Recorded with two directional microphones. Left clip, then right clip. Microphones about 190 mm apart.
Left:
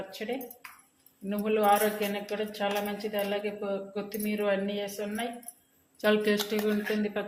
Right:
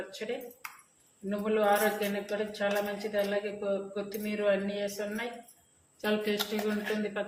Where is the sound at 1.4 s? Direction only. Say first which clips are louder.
Left 2 dB; 30° left (ahead or behind).